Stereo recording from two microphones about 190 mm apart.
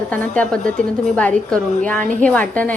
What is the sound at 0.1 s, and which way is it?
A woman's voice, 5° left (ahead or behind).